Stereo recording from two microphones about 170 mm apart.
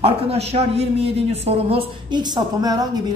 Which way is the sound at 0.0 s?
35° right (ahead or behind).